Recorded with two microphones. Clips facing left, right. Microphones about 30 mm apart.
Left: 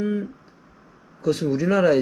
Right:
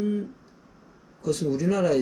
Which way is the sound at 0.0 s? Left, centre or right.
Left.